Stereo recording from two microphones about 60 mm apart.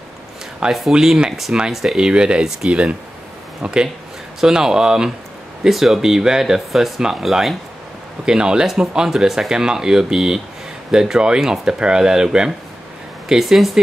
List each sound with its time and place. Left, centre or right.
0.7 s speech: centre